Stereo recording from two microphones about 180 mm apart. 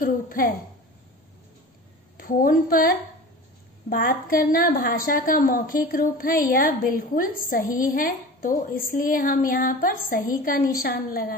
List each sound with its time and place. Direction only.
0.0 s a woman's voice: 50° left (ahead or behind)
2.1 s a woman's voice: 55° left (ahead or behind)